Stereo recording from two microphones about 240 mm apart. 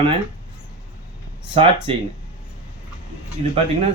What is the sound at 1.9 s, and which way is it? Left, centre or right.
Speech, right.